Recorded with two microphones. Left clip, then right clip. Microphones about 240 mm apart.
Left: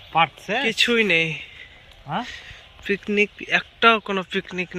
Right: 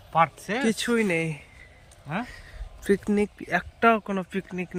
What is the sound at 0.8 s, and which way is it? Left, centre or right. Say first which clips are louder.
Speech: left 7 dB; centre.